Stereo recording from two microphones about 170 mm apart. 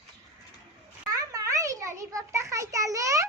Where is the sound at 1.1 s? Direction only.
20° right (ahead or behind).